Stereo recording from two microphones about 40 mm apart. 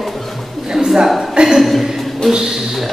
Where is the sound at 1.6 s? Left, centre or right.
Centre.